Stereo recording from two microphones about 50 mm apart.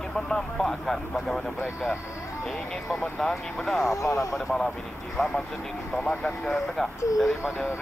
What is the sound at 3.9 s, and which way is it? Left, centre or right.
Speech, left.